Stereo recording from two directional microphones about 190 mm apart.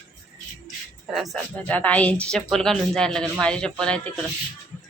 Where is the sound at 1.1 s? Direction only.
Centre (ahead or behind).